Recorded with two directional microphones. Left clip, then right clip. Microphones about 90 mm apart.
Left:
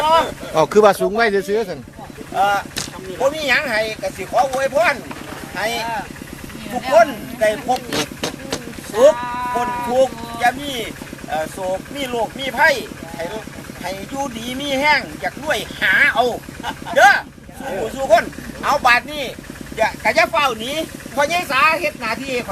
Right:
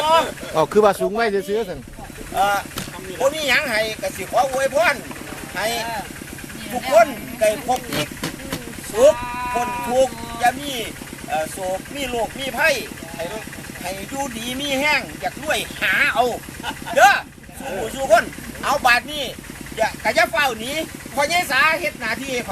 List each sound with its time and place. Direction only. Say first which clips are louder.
0.0 s a sound: left 2 dB; 5° right (ahead or behind)
0.5 s speech: left 3 dB; 15° left (ahead or behind)
2.3 s speech: left 2 dB; 5° right (ahead or behind)
9.1 s sheep: left 3 dB; 15° right (ahead or behind)
9.6 s speech: left 3 dB; 20° right (ahead or behind)
9.9 s speech: left 1 dB; 5° right (ahead or behind)
11.9 s speech: left 2 dB; 5° right (ahead or behind)
13.8 s speech: left 2 dB; 5° right (ahead or behind)